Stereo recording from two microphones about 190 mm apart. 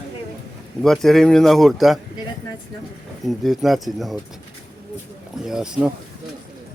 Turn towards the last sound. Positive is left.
turn(degrees=-5)  # may be behind; listen again after turning